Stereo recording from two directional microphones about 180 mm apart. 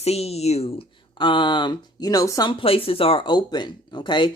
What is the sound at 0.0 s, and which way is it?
Speech, 35° left (ahead or behind).